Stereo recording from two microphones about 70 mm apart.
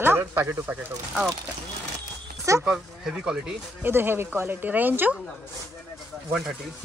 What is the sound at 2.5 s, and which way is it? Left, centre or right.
Speech, right.